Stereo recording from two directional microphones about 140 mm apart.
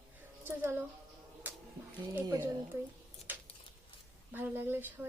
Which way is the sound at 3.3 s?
15° right (ahead or behind).